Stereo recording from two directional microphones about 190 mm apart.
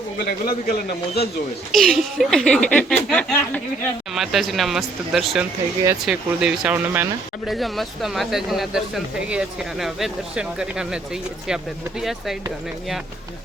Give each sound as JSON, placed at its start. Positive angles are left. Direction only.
{"t": 0.2, "sound": "a man's voice", "side_deg": 55}
{"t": 1.7, "sound": "speech", "side_deg": 0}
{"t": 7.4, "sound": "speech", "side_deg": 0}